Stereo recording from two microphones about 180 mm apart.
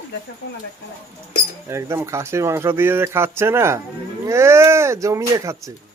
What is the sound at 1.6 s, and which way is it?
Speech, 15° right (ahead or behind).